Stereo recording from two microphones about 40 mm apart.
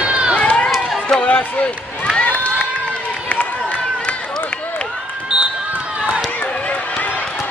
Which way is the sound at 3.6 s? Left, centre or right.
Left.